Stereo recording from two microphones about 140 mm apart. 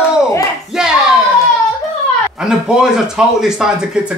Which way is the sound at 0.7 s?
5° right (ahead or behind).